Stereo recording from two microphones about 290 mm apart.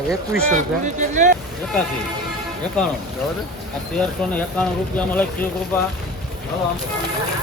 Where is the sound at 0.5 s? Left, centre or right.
Right.